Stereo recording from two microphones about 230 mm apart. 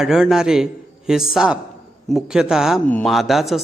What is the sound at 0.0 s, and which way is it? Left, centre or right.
A man's voice, centre.